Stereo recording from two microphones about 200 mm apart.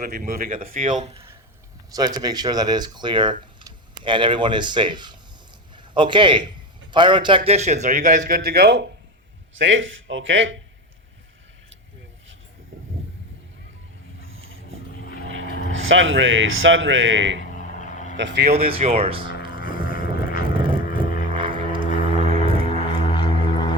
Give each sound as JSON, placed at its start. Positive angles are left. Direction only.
{"t": 0.1, "sound": "speech", "side_deg": -45}
{"t": 1.9, "sound": "a man's voice", "side_deg": -20}
{"t": 9.6, "sound": "speech", "side_deg": -70}
{"t": 14.2, "sound": "vehicle", "side_deg": -80}
{"t": 14.9, "sound": "vehicle", "side_deg": 45}
{"t": 15.7, "sound": "speech", "side_deg": -75}
{"t": 17.6, "sound": "vehicle", "side_deg": 35}
{"t": 18.2, "sound": "speech", "side_deg": -60}
{"t": 18.6, "sound": "speech", "side_deg": -30}
{"t": 19.5, "sound": "boat", "side_deg": -25}
{"t": 20.6, "sound": "vehicle", "side_deg": -25}
{"t": 21.3, "sound": "music", "side_deg": -25}
{"t": 22.6, "sound": "music", "side_deg": 30}